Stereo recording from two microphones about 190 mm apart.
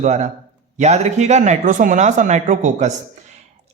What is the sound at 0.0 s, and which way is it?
A man's voice, 40° right (ahead or behind).